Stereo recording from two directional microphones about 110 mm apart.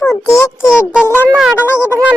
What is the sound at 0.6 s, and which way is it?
Speech, 5° right (ahead or behind).